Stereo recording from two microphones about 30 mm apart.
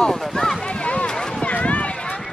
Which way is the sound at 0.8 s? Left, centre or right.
Left.